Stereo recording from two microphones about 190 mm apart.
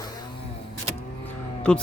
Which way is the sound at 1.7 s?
5° left (ahead or behind).